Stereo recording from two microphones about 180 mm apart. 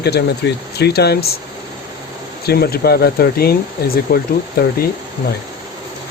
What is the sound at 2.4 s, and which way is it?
Speech, 60° left (ahead or behind).